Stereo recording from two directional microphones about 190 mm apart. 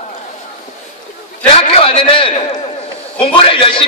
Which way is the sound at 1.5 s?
30° left (ahead or behind).